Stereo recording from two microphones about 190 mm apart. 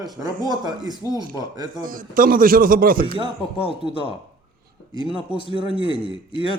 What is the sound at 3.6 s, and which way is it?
Speech, 30° right (ahead or behind).